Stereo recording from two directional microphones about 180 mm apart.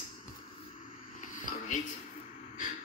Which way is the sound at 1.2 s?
45° left (ahead or behind).